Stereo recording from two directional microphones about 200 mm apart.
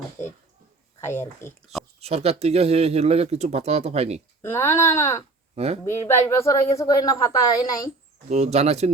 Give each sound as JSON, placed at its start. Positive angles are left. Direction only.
{"t": 1.0, "sound": "speech", "side_deg": 10}
{"t": 2.0, "sound": "speech", "side_deg": -30}
{"t": 4.4, "sound": "speech", "side_deg": 10}
{"t": 5.5, "sound": "speech", "side_deg": -30}
{"t": 5.8, "sound": "speech", "side_deg": 15}
{"t": 8.3, "sound": "speech", "side_deg": -35}